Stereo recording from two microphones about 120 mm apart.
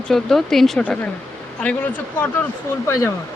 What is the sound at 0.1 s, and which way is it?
Speech, 5° left (ahead or behind).